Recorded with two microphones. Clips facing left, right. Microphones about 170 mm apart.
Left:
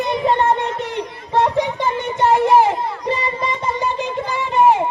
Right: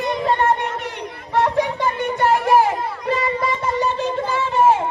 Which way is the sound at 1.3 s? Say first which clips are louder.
Left 1 dB; 20° left (ahead or behind).